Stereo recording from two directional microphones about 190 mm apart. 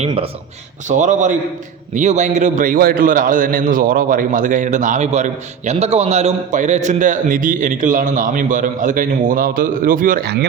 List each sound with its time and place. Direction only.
0.0 s speech: 30° right (ahead or behind)
0.9 s a man's voice: 40° right (ahead or behind)